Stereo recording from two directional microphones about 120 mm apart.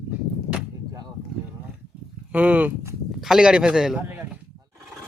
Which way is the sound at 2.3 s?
10° right (ahead or behind).